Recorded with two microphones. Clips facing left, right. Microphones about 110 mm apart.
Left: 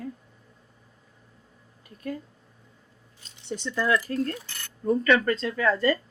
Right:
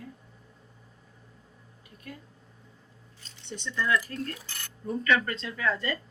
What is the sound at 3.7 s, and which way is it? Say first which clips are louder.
Speech: left 3 dB; 40° left (ahead or behind).